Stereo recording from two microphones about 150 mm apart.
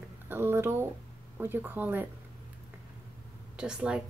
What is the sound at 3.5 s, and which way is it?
Speech, 5° right (ahead or behind).